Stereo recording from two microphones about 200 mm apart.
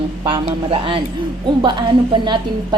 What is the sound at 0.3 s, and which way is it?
Speech, 25° right (ahead or behind).